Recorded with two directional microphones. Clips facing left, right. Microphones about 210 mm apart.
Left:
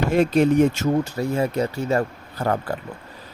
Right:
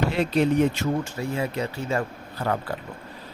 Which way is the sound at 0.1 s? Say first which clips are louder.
Left 5 dB; 45° left (ahead or behind).